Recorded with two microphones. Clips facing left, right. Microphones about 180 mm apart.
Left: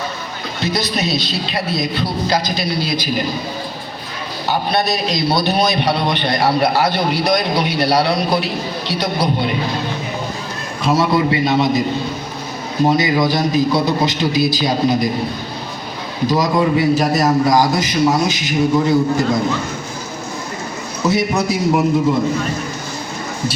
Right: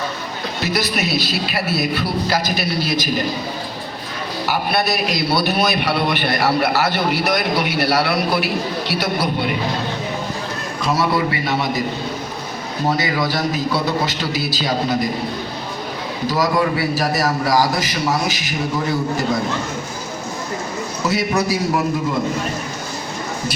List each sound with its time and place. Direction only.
0.6 s a man's voice: 20° left (ahead or behind)
4.4 s a man's voice: 20° left (ahead or behind)
10.8 s a man's voice: 20° left (ahead or behind)
12.8 s a man's voice: 15° left (ahead or behind)
16.2 s a man's voice: 20° left (ahead or behind)
21.0 s a man's voice: 20° left (ahead or behind)